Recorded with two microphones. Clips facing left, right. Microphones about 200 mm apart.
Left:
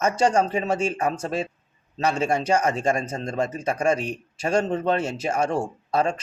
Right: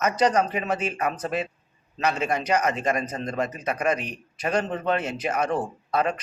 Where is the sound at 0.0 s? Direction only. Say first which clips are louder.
Left 1 dB; 30° left (ahead or behind).